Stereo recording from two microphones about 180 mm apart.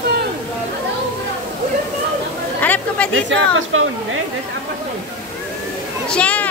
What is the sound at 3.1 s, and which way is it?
Speech, 90° right.